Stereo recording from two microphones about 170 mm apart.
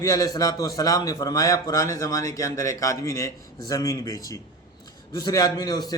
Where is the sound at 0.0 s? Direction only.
20° left (ahead or behind).